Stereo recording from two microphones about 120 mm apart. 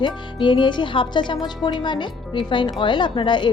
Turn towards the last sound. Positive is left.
turn(degrees=40)  # may be behind; listen again after turning